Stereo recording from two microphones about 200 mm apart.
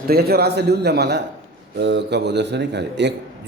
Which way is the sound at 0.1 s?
50° right (ahead or behind).